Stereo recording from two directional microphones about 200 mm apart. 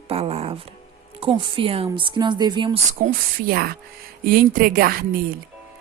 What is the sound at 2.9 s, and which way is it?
A woman's voice, 45° right (ahead or behind).